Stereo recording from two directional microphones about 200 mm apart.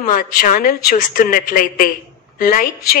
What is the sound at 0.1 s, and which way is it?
A woman's voice, 45° left (ahead or behind).